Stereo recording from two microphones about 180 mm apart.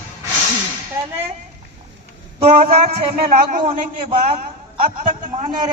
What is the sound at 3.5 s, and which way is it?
Speech, 45° right (ahead or behind).